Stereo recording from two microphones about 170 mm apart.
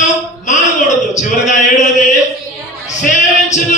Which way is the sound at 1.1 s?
45° left (ahead or behind).